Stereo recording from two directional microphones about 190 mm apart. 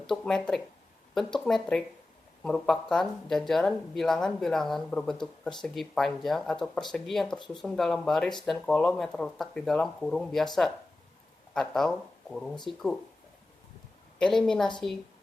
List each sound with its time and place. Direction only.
0.1 s speech: 5° left (ahead or behind)
14.2 s speech: 5° left (ahead or behind)